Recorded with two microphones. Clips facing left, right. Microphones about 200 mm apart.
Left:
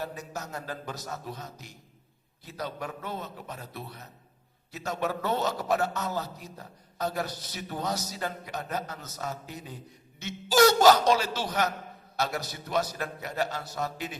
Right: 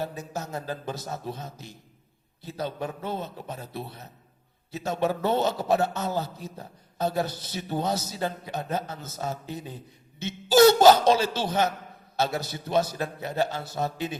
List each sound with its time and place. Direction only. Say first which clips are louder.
0.0 s a man's voice: right 4 dB; 25° right (ahead or behind)